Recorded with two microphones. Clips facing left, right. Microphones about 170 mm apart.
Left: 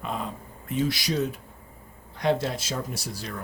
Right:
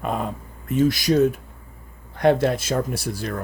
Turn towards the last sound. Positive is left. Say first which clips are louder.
# right 8 dB
turn(degrees=-55)  # may be behind; listen again after turning